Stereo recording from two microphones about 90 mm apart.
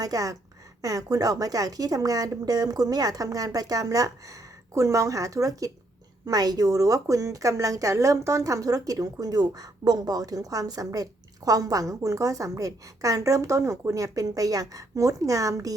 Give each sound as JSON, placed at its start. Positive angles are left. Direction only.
{"t": 0.0, "sound": "a woman's voice", "side_deg": -40}